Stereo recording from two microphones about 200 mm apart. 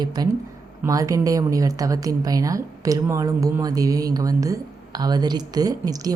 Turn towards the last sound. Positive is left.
turn(degrees=-20)  # may be behind; listen again after turning